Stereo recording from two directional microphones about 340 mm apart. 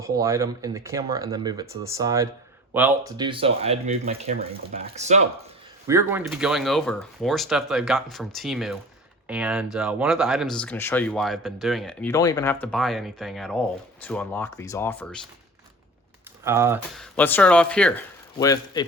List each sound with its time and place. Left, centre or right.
0.0 s speech: centre
5.9 s speech: centre
16.4 s speech: centre